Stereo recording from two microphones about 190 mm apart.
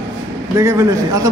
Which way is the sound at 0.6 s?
15° right (ahead or behind).